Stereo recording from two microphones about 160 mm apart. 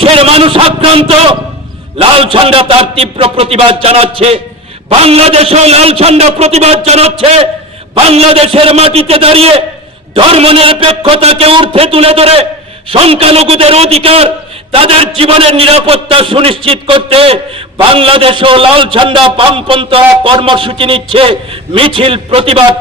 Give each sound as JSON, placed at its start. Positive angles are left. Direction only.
{"t": 0.0, "sound": "a man's voice", "side_deg": -35}